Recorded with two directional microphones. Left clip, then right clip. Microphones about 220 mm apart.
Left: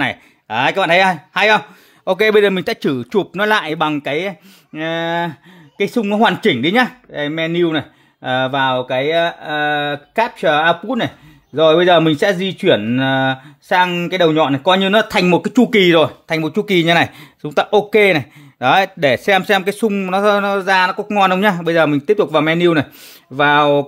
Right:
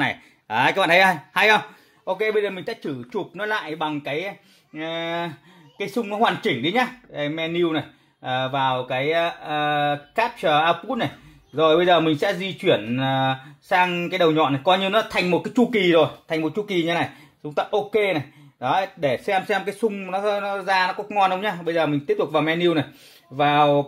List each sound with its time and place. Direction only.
0.0 s speech: 25° left (ahead or behind)
2.0 s a man's voice: 50° left (ahead or behind)